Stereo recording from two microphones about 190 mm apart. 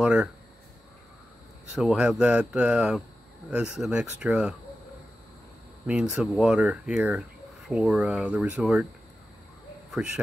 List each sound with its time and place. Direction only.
0.0 s speech: 5° right (ahead or behind)
1.7 s speech: 5° right (ahead or behind)
5.9 s speech: 5° right (ahead or behind)
9.8 s speech: 5° right (ahead or behind)